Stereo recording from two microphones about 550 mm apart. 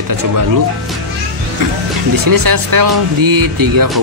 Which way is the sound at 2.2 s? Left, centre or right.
Right.